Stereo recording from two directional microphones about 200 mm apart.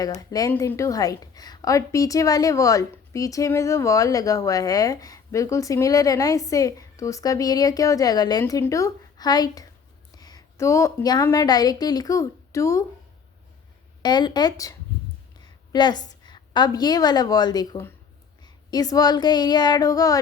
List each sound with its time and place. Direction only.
0.0 s a woman's voice: 20° left (ahead or behind)
14.0 s a woman's voice: 20° left (ahead or behind)